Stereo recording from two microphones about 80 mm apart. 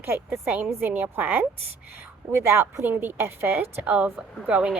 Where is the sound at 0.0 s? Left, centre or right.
Right.